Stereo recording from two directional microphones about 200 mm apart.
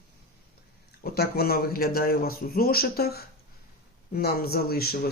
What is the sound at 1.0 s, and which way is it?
Speech, 50° left (ahead or behind).